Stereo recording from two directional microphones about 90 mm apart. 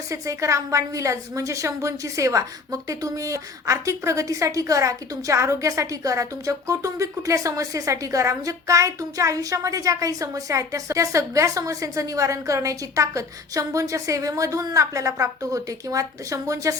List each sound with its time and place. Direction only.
0.1 s a woman's voice: 35° right (ahead or behind)